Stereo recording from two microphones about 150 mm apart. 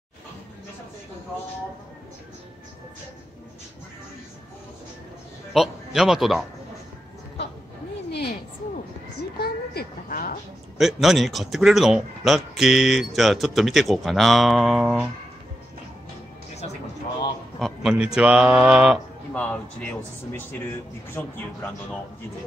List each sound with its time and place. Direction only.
5.5 s speech: centre (ahead or behind)
8.1 s a sound: 90° left
9.4 s a sound: 80° left
10.8 s speech: centre (ahead or behind)
17.6 s speech: centre (ahead or behind)
19.3 s a man's voice: 10° left (ahead or behind)